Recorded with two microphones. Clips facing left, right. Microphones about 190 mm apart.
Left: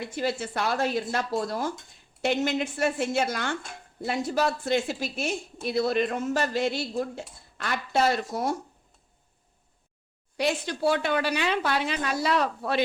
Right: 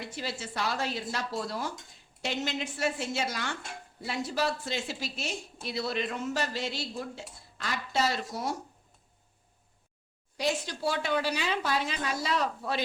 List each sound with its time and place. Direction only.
0.1 s speech: 55° left (ahead or behind)
10.3 s speech: 60° left (ahead or behind)